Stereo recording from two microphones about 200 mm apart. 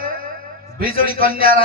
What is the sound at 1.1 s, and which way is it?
Speech, 45° right (ahead or behind).